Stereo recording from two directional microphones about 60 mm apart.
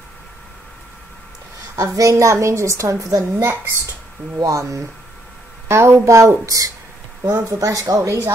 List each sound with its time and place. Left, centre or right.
1.8 s a woman's voice: right
3.3 s a woman's voice: right
4.4 s speech: right
5.7 s a woman's voice: right